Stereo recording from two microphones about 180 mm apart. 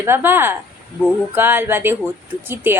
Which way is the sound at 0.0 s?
15° right (ahead or behind).